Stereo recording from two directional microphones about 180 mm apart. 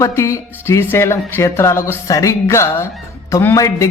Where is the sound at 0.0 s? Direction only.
15° left (ahead or behind).